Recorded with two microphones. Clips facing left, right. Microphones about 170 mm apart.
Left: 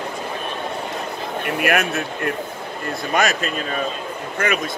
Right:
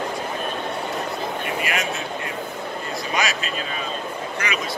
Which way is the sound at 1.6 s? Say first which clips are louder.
Left 6 dB; 60° left (ahead or behind).